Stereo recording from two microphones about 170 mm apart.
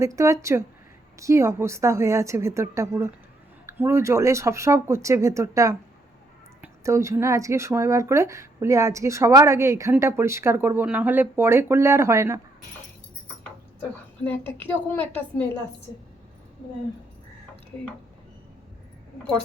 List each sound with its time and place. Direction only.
0.0 s speech: 20° right (ahead or behind)
14.6 s a woman's voice: 10° left (ahead or behind)